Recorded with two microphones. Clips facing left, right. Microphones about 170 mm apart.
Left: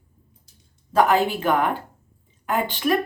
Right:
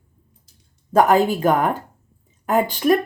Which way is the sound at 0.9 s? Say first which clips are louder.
Right 3 dB; 45° right (ahead or behind).